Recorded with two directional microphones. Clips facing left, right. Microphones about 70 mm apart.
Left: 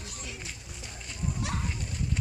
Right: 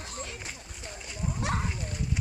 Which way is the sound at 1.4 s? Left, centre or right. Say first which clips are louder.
Right 5 dB; right.